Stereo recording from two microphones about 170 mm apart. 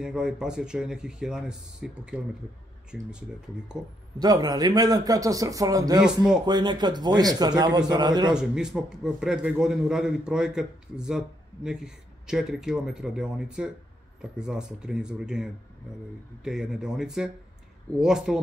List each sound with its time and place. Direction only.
0.0 s a man's voice: 5° right (ahead or behind)
4.2 s a man's voice: 25° right (ahead or behind)
5.9 s a man's voice: 5° right (ahead or behind)
6.4 s a man's voice: 25° right (ahead or behind)
8.3 s a man's voice: 5° right (ahead or behind)